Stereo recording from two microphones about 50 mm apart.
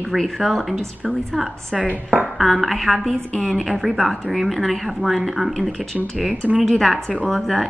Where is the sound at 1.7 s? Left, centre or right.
Right.